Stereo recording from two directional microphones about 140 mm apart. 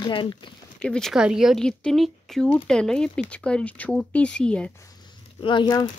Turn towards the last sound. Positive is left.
turn(degrees=35)  # may be behind; listen again after turning